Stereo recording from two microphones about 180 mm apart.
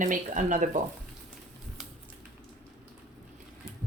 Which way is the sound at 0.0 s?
45° right (ahead or behind).